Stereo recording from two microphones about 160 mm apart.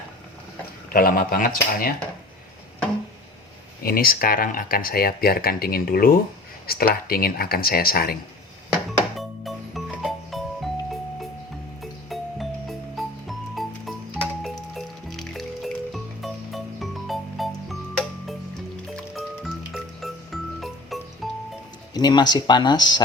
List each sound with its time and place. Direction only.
0.9 s speech: 60° left (ahead or behind)
3.8 s speech: 65° left (ahead or behind)
9.1 s music: centre (ahead or behind)
11.8 s music: centre (ahead or behind)
21.9 s speech: 25° left (ahead or behind)